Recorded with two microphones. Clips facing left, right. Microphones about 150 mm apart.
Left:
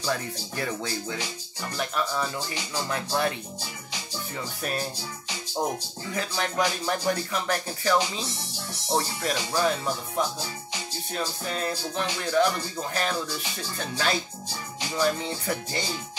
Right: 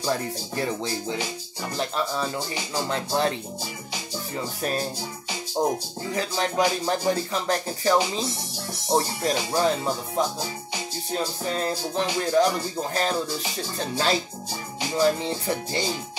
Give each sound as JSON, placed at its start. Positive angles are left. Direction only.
{"t": 0.0, "sound": "music", "side_deg": -25}
{"t": 4.6, "sound": "speech", "side_deg": -35}
{"t": 6.1, "sound": "music", "side_deg": -30}
{"t": 8.9, "sound": "speech", "side_deg": -35}
{"t": 15.0, "sound": "music", "side_deg": -30}